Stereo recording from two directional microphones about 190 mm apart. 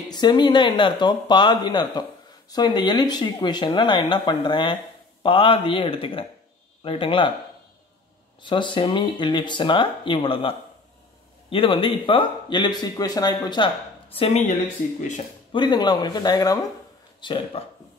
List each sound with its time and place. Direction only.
0.1 s speech: 25° left (ahead or behind)
8.4 s speech: 25° left (ahead or behind)
11.5 s speech: 30° left (ahead or behind)
15.5 s speech: 25° left (ahead or behind)